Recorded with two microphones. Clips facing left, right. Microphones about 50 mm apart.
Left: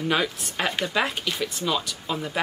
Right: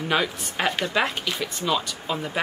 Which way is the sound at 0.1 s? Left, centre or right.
Centre.